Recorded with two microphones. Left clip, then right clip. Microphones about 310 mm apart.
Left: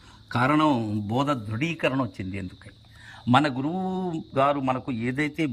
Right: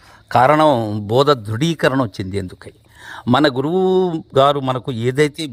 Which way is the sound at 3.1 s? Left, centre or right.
Centre.